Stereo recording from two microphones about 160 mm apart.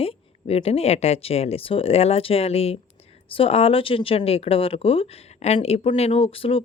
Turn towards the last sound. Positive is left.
turn(degrees=35)  # may be behind; listen again after turning